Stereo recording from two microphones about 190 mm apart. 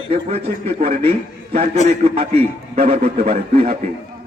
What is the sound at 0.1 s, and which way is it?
A man's voice, 30° right (ahead or behind).